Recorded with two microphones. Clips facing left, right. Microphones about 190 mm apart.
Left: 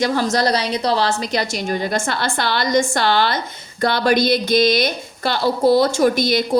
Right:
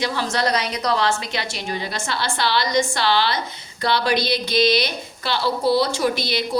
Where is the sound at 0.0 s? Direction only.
45° left (ahead or behind).